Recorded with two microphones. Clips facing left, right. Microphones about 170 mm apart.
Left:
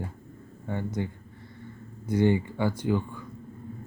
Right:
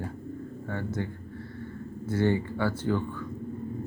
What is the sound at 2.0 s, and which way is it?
Speech, 15° left (ahead or behind).